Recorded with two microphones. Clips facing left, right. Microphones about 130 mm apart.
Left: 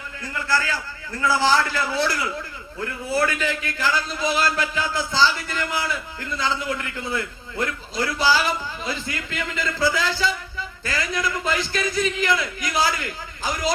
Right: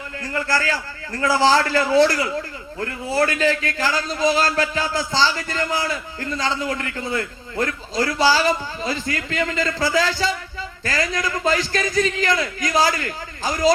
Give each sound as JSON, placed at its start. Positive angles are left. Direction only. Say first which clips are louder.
{"t": 0.2, "sound": "a man's voice", "louder": "right 2 dB", "side_deg": -35}